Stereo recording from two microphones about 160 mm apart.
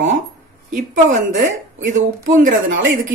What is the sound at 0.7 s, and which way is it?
Speech, 50° right (ahead or behind).